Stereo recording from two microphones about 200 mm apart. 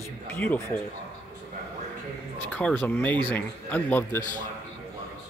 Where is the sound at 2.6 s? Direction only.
10° left (ahead or behind).